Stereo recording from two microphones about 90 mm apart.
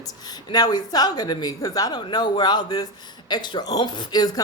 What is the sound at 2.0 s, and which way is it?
Speech, 60° left (ahead or behind).